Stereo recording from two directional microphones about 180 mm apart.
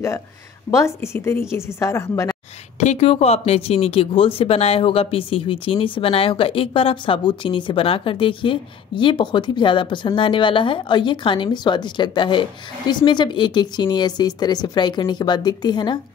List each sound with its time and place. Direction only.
0.7 s a woman's voice: 15° left (ahead or behind)
2.8 s speech: 35° left (ahead or behind)